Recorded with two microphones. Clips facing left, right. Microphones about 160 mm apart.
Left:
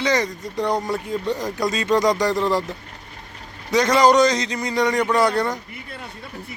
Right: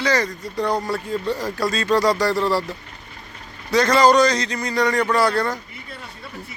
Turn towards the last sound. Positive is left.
turn(degrees=20)  # may be behind; listen again after turning